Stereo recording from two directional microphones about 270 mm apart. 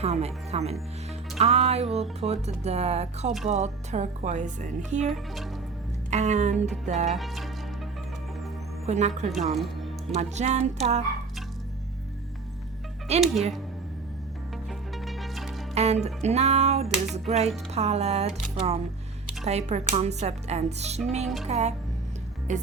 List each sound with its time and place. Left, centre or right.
0.0 s speech: right
5.0 s speech: centre
6.1 s speech: right
7.1 s speech: centre
8.9 s speech: right
13.1 s speech: right
15.0 s music: centre
15.7 s speech: right